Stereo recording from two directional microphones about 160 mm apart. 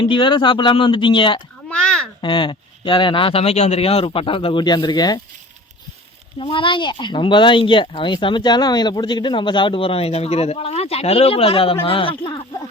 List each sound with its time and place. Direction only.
0.0 s speech: 30° left (ahead or behind)
1.7 s a sound: 5° left (ahead or behind)
2.2 s speech: 30° left (ahead or behind)
6.4 s speech: 30° left (ahead or behind)